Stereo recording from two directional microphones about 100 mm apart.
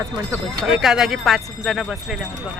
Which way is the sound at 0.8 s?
5° right (ahead or behind).